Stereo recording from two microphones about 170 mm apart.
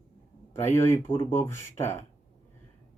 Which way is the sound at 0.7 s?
15° left (ahead or behind).